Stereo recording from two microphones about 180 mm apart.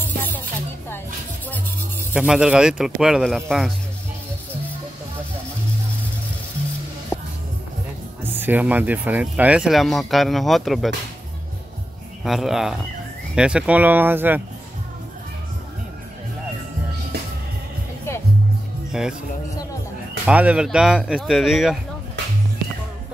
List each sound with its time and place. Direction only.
0.0 s music: 10° left (ahead or behind)
2.1 s speech: 5° right (ahead or behind)
7.1 s music: 25° left (ahead or behind)
8.2 s speech: 10° right (ahead or behind)
12.3 s speech: centre (ahead or behind)
18.9 s speech: 5° right (ahead or behind)
20.2 s speech: 5° right (ahead or behind)